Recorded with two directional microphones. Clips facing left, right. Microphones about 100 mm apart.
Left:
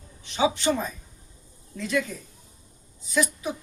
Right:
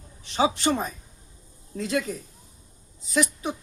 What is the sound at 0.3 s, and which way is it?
Speech, 35° right (ahead or behind).